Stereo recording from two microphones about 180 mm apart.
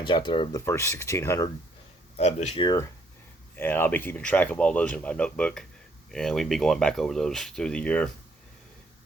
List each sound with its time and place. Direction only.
0.0 s speech: 25° left (ahead or behind)
0.6 s speech: 15° left (ahead or behind)
2.1 s speech: 40° left (ahead or behind)
3.5 s speech: 10° left (ahead or behind)